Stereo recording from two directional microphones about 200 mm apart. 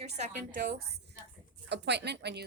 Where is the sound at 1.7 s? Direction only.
55° right (ahead or behind).